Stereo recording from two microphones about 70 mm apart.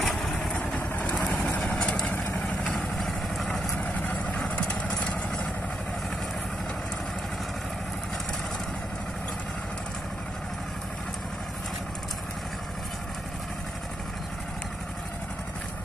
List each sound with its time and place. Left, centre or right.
0.0 s vehicle: centre
0.6 s vehicle: left
1.6 s vehicle: centre
3.0 s vehicle: centre
3.8 s vehicle: left